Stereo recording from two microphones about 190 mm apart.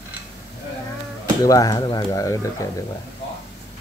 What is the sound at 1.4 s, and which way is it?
Speech, 20° left (ahead or behind).